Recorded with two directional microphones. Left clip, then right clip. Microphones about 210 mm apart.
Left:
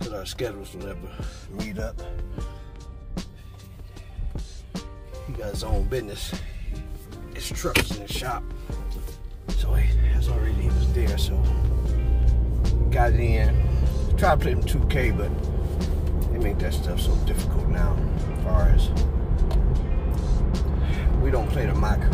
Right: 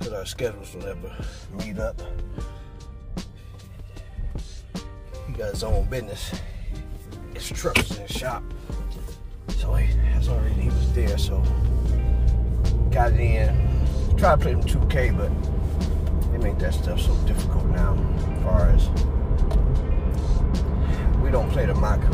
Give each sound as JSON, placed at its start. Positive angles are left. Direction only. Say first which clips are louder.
{"t": 0.0, "sound": "speech", "louder": "right 2 dB", "side_deg": 0}
{"t": 3.2, "sound": "music", "louder": "even", "side_deg": 0}
{"t": 4.7, "sound": "music", "louder": "even", "side_deg": 0}